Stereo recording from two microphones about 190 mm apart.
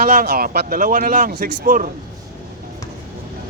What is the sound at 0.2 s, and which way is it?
Speech, 50° right (ahead or behind).